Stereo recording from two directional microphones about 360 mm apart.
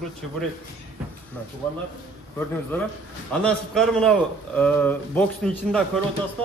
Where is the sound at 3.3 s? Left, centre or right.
Centre.